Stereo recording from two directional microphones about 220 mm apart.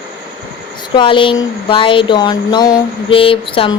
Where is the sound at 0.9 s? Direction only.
20° left (ahead or behind).